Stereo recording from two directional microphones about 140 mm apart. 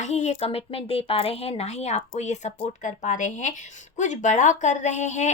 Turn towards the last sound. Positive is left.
turn(degrees=60)  # may be behind; listen again after turning